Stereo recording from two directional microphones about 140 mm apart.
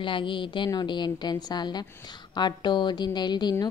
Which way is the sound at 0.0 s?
35° left (ahead or behind).